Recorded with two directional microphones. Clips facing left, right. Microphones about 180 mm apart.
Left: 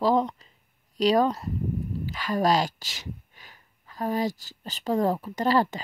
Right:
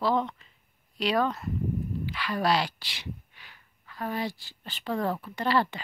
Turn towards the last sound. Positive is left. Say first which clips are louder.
# left 3 dB
turn(degrees=40)  # may be behind; listen again after turning